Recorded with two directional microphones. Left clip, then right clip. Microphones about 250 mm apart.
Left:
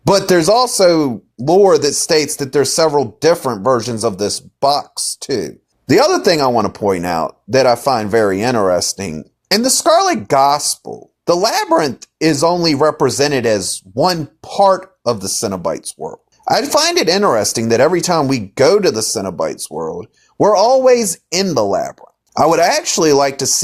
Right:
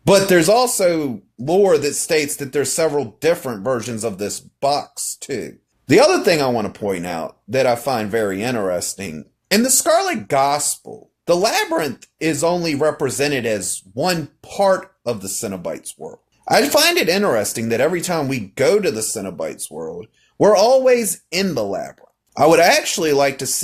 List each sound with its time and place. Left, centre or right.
0.0 s speech: left